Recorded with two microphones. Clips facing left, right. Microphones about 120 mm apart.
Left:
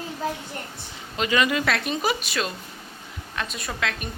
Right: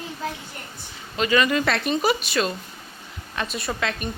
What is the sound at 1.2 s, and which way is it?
Speech, 20° left (ahead or behind).